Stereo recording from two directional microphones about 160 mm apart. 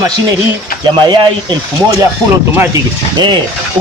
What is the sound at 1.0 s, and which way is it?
Speech, 30° right (ahead or behind).